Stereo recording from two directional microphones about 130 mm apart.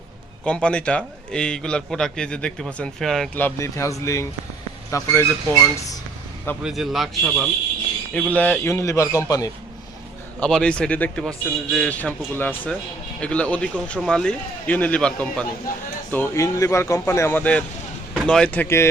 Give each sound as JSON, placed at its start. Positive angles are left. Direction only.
{"t": 0.4, "sound": "a man's voice", "side_deg": 10}
{"t": 3.3, "sound": "speech", "side_deg": 20}
{"t": 6.6, "sound": "a man's voice", "side_deg": -5}
{"t": 8.1, "sound": "speech", "side_deg": 10}
{"t": 10.4, "sound": "a man's voice", "side_deg": 10}